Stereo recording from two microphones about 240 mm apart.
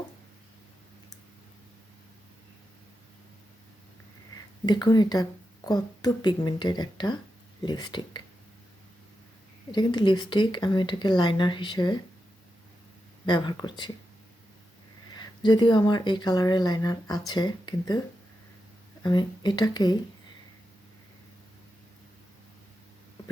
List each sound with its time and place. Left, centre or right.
4.6 s speech: centre
9.7 s speech: centre
13.2 s speech: centre
15.2 s speech: centre
19.0 s speech: centre